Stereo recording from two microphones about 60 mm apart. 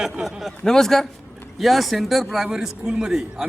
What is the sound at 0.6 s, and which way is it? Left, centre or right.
A man's voice, centre.